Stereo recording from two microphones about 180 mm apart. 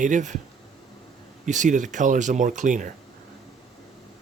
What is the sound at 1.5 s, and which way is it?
Speech, 45° right (ahead or behind).